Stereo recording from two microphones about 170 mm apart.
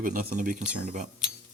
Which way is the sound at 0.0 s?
55° right (ahead or behind).